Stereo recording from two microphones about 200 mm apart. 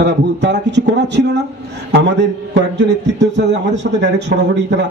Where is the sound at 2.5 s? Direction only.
60° right (ahead or behind).